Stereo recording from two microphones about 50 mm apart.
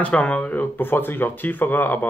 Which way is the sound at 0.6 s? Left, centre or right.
Left.